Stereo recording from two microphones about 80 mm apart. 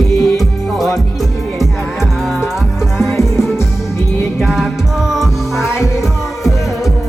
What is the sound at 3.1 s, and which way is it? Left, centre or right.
Music, left.